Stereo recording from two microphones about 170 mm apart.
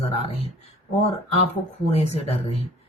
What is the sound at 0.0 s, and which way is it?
Speech, 35° left (ahead or behind).